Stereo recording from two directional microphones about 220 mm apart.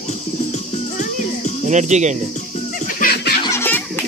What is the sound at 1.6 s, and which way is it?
Speech, 35° right (ahead or behind).